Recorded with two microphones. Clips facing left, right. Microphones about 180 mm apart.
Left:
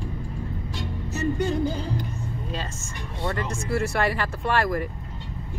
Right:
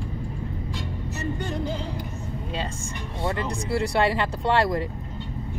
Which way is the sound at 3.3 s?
20° right (ahead or behind).